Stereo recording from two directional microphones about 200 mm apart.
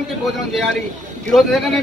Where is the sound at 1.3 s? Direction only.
Centre (ahead or behind).